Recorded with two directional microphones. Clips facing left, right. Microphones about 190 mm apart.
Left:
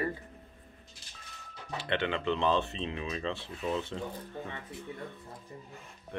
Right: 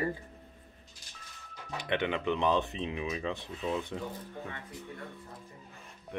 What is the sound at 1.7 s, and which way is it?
Speech, 15° right (ahead or behind).